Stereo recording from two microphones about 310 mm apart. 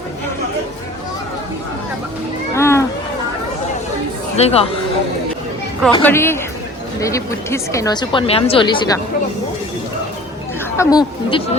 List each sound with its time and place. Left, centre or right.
2.6 s a sound: centre
4.4 s speech: centre
5.9 s a woman's voice: centre
10.8 s speech: centre